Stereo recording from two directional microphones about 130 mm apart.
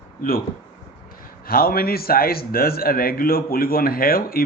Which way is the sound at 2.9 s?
90° left.